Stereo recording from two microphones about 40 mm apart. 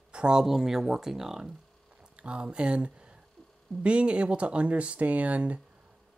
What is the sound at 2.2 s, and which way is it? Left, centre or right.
Speech, right.